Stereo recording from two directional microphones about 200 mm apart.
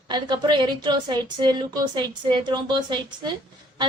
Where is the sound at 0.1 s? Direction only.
20° right (ahead or behind).